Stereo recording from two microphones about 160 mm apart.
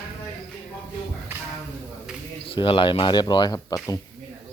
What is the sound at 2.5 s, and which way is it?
Speech, 35° left (ahead or behind).